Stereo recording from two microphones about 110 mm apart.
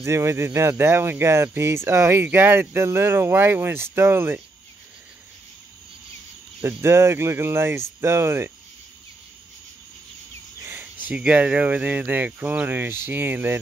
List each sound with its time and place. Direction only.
0.0 s speech: 25° right (ahead or behind)
6.8 s speech: 25° right (ahead or behind)
10.6 s speech: 20° right (ahead or behind)